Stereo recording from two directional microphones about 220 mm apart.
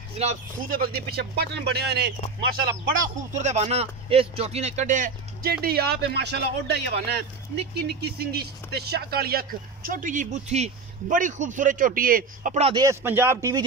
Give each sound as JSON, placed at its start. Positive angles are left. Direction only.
{"t": 0.2, "sound": "speech", "side_deg": -35}
{"t": 3.2, "sound": "speech", "side_deg": -30}
{"t": 12.7, "sound": "speech", "side_deg": -10}